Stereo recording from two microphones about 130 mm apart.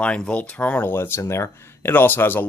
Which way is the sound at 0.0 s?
10° left (ahead or behind).